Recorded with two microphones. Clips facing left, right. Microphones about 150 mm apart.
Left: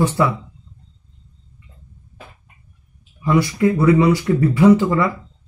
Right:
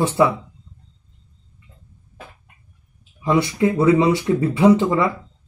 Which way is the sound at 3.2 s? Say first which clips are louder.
Left 1 dB; 20° right (ahead or behind).